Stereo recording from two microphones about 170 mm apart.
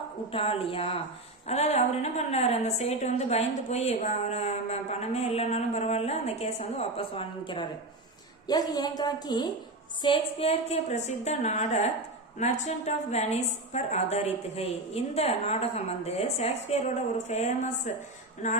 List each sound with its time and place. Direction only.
0.3 s a woman's voice: 35° left (ahead or behind)
18.4 s music: 45° left (ahead or behind)